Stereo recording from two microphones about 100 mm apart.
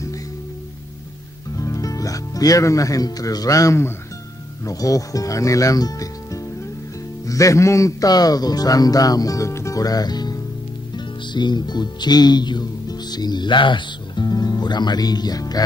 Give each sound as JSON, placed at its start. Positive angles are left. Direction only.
{"t": 1.6, "sound": "speech", "side_deg": 35}